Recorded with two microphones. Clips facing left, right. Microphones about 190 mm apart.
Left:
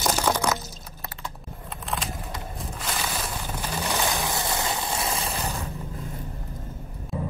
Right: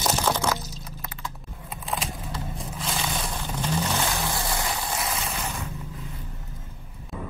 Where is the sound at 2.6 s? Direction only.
Centre (ahead or behind); by 5.6 s 35° left (ahead or behind).